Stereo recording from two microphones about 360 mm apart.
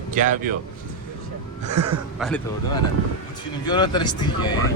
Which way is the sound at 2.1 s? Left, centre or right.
Centre.